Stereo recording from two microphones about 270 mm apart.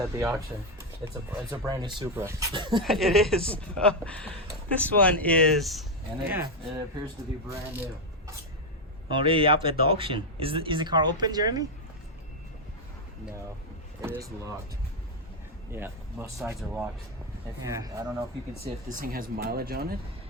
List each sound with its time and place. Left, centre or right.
0.0 s speech: centre
2.8 s a woman's voice: centre
9.0 s speech: centre
14.0 s speech: centre
15.7 s a woman's voice: centre
18.6 s speech: right